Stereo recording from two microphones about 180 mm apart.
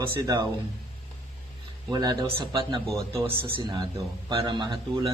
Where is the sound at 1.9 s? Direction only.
20° right (ahead or behind).